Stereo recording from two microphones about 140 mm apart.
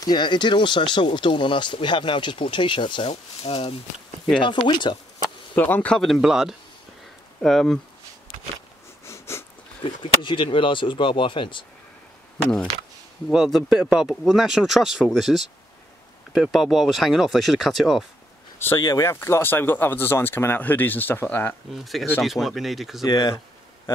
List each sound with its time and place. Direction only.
0.0 s speech: 30° left (ahead or behind)
5.6 s speech: 10° left (ahead or behind)
9.0 s wheeze: 20° left (ahead or behind)
9.8 s speech: 35° left (ahead or behind)
13.3 s speech: 5° right (ahead or behind)
18.8 s speech: 25° left (ahead or behind)
21.7 s speech: centre (ahead or behind)
23.0 s speech: 25° left (ahead or behind)